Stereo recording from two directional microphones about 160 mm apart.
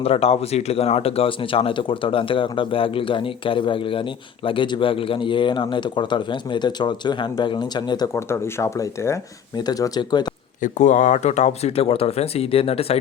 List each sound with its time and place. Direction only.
0.0 s speech: 40° left (ahead or behind)
10.6 s speech: 50° left (ahead or behind)